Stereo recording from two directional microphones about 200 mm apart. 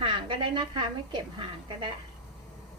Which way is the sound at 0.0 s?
25° right (ahead or behind).